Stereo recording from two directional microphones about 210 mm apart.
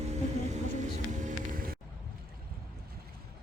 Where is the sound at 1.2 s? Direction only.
45° right (ahead or behind).